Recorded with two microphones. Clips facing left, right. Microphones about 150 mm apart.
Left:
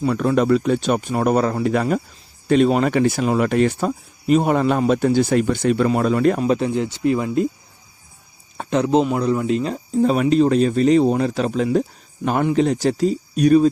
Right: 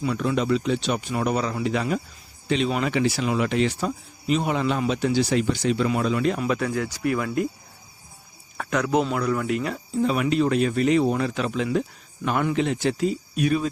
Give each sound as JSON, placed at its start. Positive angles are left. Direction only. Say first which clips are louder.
{"t": 0.0, "sound": "speech", "louder": "left 6 dB", "side_deg": 50}
{"t": 6.4, "sound": "speech", "louder": "left 5 dB", "side_deg": 30}
{"t": 8.5, "sound": "speech", "louder": "left 5 dB", "side_deg": 30}